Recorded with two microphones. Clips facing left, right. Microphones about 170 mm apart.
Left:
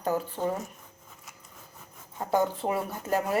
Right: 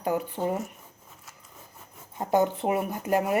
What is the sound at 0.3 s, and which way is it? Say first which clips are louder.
Speech: right 2 dB; 15° right (ahead or behind).